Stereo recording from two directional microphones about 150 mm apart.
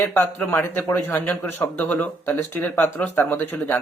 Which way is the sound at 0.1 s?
15° left (ahead or behind).